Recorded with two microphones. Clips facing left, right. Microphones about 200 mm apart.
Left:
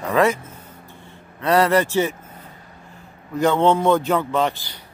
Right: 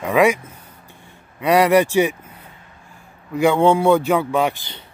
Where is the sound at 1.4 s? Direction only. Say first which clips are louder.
Right 3 dB; 15° right (ahead or behind).